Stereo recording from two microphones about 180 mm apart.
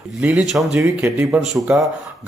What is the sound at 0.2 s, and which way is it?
Speech, 5° right (ahead or behind).